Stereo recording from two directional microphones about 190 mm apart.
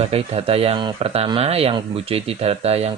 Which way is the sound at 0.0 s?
30° right (ahead or behind).